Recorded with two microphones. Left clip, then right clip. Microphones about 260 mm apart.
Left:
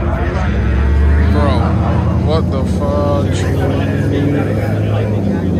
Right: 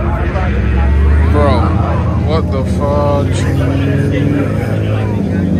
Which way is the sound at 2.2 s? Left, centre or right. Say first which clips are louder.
Right 1 dB; centre.